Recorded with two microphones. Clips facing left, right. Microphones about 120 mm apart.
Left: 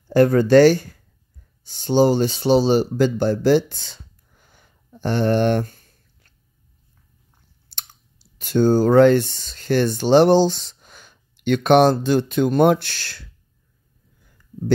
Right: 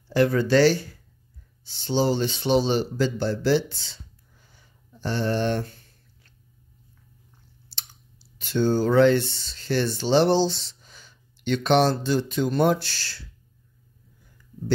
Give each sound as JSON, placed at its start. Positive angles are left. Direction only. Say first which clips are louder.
{"t": 0.1, "sound": "speech", "louder": "left 7 dB", "side_deg": 45}
{"t": 7.7, "sound": "clicking", "louder": "left 4 dB", "side_deg": 50}
{"t": 8.4, "sound": "speech", "louder": "left 6 dB", "side_deg": 45}